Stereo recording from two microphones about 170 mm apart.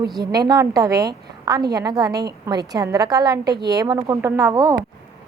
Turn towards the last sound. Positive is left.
turn(degrees=-20)  # may be behind; listen again after turning